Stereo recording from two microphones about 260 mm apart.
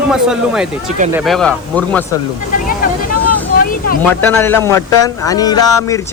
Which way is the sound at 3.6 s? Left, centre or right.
Left.